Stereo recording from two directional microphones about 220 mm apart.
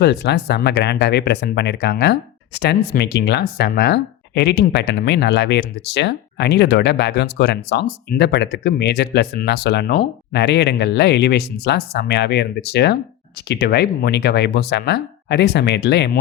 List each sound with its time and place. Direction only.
0.0 s speech: 50° left (ahead or behind)